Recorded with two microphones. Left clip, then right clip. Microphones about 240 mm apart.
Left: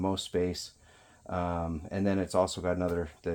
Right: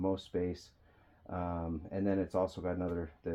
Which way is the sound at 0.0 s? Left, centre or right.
Left.